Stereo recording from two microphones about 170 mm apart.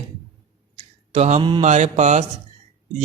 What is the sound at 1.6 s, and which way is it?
Mantra, 45° right (ahead or behind).